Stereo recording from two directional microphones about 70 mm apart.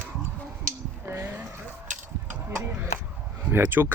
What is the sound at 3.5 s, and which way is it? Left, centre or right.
Speech, right.